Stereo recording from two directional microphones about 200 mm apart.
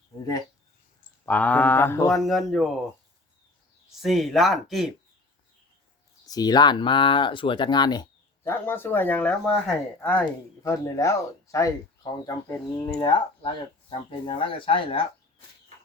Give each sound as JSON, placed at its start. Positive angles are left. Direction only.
{"t": 1.2, "sound": "speech", "side_deg": 10}
{"t": 4.0, "sound": "speech", "side_deg": 0}
{"t": 6.2, "sound": "speech", "side_deg": 20}
{"t": 8.4, "sound": "speech", "side_deg": 10}